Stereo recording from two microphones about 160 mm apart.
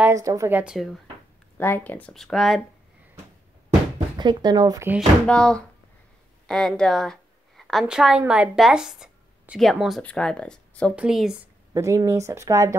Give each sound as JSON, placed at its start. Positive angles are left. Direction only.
{"t": 0.0, "sound": "a woman's voice", "side_deg": -20}
{"t": 1.6, "sound": "speech", "side_deg": 10}
{"t": 4.2, "sound": "speech", "side_deg": -25}
{"t": 5.2, "sound": "a woman's voice", "side_deg": 5}
{"t": 6.4, "sound": "a sound", "side_deg": 5}
{"t": 7.8, "sound": "a woman's voice", "side_deg": -5}
{"t": 11.0, "sound": "a woman's voice", "side_deg": -5}
{"t": 11.7, "sound": "speech", "side_deg": -20}